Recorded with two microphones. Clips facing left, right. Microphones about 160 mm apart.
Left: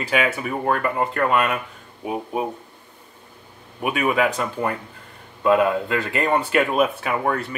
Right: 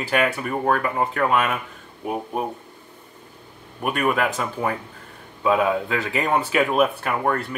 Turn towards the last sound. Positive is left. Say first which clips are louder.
# even
turn(degrees=0)  # may be behind; listen again after turning